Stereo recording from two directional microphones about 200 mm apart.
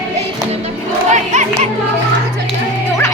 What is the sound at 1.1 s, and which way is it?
Crowd, 35° right (ahead or behind).